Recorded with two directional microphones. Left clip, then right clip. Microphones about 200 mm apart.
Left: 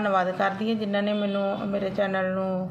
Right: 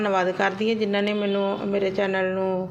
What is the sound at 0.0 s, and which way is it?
Speech, 25° right (ahead or behind).